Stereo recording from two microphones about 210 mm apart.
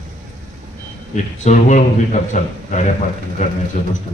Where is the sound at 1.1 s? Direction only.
35° left (ahead or behind).